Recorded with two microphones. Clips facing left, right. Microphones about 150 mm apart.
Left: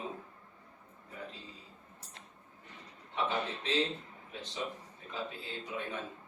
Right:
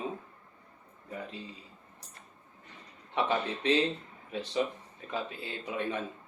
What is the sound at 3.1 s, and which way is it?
Speech, 75° right (ahead or behind).